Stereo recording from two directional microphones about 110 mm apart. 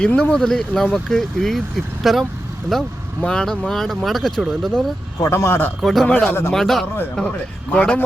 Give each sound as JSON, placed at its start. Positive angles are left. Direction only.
{"t": 0.0, "sound": "speech", "side_deg": 10}
{"t": 5.2, "sound": "a man's voice", "side_deg": 25}
{"t": 5.8, "sound": "speech", "side_deg": 0}